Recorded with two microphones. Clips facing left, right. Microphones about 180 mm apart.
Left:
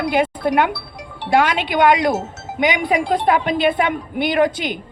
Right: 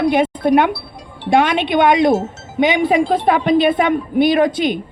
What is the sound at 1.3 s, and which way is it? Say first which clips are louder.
A woman's voice: right 2 dB; 25° right (ahead or behind).